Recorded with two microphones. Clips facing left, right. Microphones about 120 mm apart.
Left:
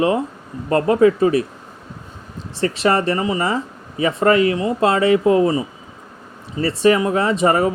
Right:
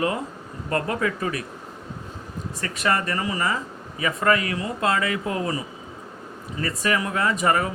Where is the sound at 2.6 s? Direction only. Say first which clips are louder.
Left 8 dB; 30° left (ahead or behind).